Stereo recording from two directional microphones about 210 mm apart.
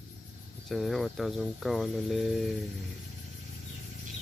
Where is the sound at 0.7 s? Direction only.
Centre (ahead or behind).